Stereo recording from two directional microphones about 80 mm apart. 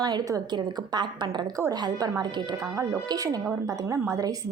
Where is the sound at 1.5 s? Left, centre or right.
Right.